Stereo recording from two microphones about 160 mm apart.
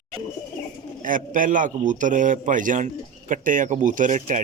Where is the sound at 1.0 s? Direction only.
55° right (ahead or behind).